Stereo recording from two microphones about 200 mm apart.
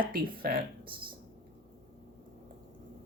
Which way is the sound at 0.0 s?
45° right (ahead or behind).